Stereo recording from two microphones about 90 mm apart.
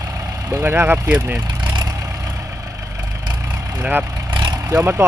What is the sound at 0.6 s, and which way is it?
Speech, 25° right (ahead or behind).